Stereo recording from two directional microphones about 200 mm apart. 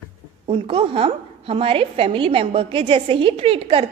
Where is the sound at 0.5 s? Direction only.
25° right (ahead or behind).